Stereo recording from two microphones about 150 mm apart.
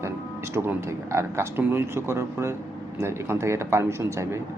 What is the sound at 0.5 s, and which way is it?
Speech, 20° right (ahead or behind).